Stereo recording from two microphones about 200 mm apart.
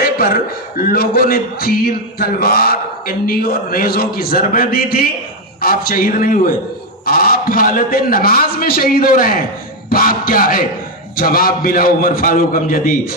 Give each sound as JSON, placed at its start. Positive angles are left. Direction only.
{"t": 0.0, "sound": "a sound", "side_deg": 45}
{"t": 0.8, "sound": "a man's voice", "side_deg": 50}
{"t": 9.9, "sound": "music", "side_deg": 45}
{"t": 11.2, "sound": "a man's voice", "side_deg": 45}